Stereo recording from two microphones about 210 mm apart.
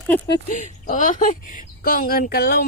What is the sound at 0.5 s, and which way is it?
Speech, 35° left (ahead or behind).